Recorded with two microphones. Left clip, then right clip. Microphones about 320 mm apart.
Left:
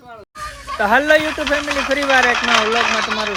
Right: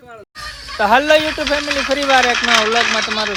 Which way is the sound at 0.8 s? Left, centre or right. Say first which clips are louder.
Right 1 dB; centre.